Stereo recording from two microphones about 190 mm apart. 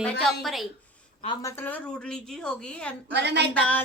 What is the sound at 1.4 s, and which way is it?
A woman's voice, 15° left (ahead or behind).